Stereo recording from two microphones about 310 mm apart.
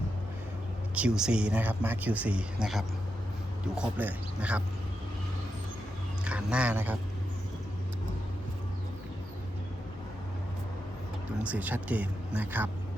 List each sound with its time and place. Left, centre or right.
0.9 s speech: centre
6.2 s speech: centre
11.3 s speech: centre